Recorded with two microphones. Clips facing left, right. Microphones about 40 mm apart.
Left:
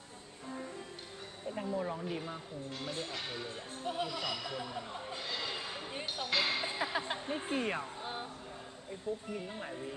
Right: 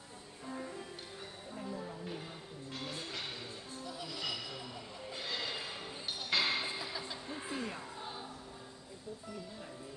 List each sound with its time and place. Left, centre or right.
0.5 s music: centre
1.8 s a sound: left
2.0 s a sound: centre
3.8 s music: left
4.2 s a sound: centre
5.1 s train: centre
6.1 s basketball bounce: centre
6.8 s music: left
9.3 s speech: left